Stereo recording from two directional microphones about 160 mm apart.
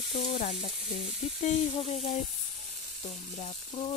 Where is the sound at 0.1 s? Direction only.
40° left (ahead or behind).